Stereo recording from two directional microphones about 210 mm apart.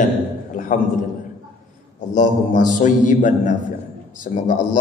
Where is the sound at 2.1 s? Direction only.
35° left (ahead or behind).